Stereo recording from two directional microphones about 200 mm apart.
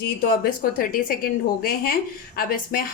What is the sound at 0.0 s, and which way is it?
A woman's voice, 50° left (ahead or behind).